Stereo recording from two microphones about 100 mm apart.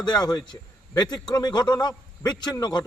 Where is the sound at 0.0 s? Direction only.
45° left (ahead or behind).